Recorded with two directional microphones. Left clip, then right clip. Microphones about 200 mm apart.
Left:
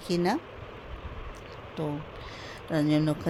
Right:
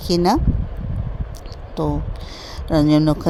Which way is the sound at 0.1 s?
40° right (ahead or behind).